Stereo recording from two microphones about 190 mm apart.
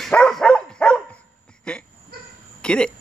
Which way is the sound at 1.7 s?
5° left (ahead or behind).